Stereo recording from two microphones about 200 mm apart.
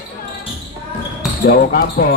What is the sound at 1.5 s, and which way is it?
Speech, 50° left (ahead or behind).